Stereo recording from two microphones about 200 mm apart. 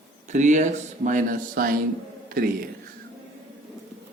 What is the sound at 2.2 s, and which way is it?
Whispering, 50° right (ahead or behind).